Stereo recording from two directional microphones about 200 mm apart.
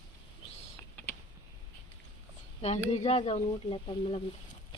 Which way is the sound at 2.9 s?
30° left (ahead or behind).